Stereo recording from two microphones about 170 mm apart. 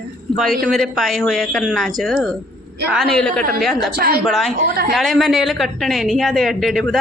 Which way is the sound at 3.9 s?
65° right (ahead or behind).